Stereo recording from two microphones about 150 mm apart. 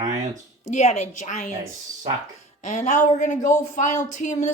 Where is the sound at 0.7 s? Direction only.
50° left (ahead or behind).